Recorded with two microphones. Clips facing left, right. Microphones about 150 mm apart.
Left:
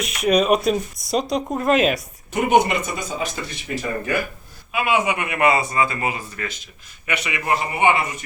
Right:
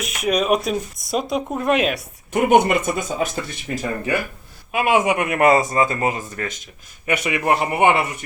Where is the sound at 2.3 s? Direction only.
50° right (ahead or behind).